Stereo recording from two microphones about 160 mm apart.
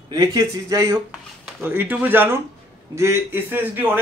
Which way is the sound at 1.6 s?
10° right (ahead or behind).